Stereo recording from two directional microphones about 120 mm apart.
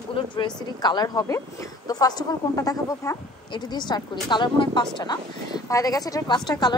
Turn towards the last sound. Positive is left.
turn(degrees=35)  # may be behind; listen again after turning